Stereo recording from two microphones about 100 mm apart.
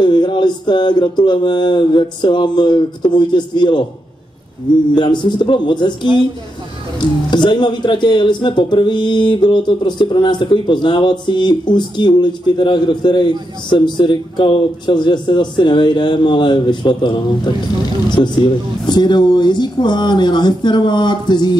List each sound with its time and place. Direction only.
0.0 s speech: 50° left (ahead or behind)
4.9 s speech: 50° left (ahead or behind)
7.2 s speech: 50° left (ahead or behind)